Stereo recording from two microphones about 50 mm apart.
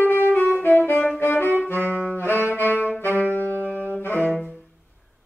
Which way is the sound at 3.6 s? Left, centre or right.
Left.